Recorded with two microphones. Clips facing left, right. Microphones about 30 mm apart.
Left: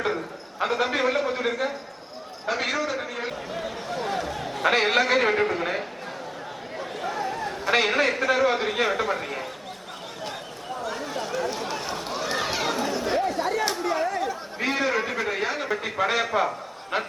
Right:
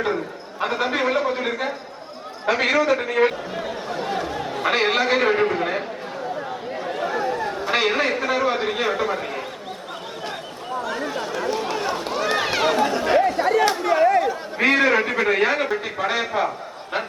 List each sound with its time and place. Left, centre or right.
0.6 s a man's voice: centre
2.5 s a man's voice: right
3.5 s a man's voice: centre
6.8 s a sound: centre
7.7 s a man's voice: centre
10.8 s chatter: right
11.9 s run: right
12.3 s chatter: right
14.6 s a man's voice: right
15.7 s a man's voice: centre